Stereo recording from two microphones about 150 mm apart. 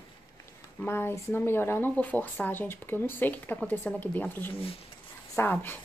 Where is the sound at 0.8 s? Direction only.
15° left (ahead or behind).